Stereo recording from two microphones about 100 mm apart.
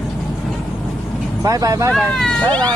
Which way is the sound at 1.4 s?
35° right (ahead or behind).